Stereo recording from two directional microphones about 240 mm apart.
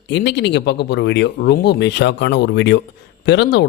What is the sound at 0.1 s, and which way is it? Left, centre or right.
Speech, left.